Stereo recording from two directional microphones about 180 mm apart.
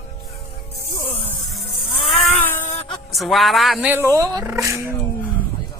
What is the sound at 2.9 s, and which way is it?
Speech, centre (ahead or behind).